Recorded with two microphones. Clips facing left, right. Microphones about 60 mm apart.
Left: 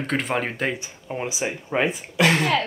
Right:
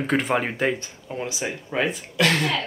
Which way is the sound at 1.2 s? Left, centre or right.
Left.